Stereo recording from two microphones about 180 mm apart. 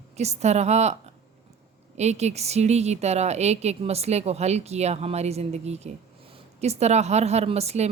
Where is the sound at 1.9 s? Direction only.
40° right (ahead or behind).